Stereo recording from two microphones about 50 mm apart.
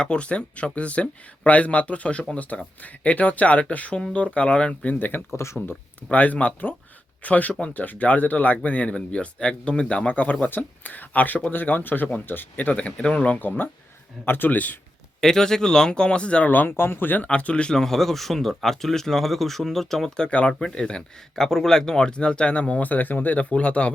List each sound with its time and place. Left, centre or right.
0.0 s speech: centre
4.7 s speech: left
5.3 s speech: left
6.1 s speech: left
10.1 s speech: left
15.2 s speech: centre
16.5 s speech: left
17.2 s speech: left
17.7 s speech: centre
20.1 s speech: centre
21.4 s speech: centre; by 23.9 s left